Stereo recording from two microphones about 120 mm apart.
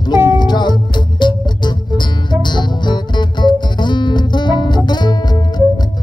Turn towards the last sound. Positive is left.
turn(degrees=35)  # may be behind; listen again after turning